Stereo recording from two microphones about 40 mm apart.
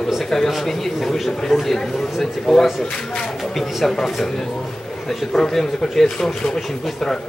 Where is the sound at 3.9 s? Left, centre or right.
Centre.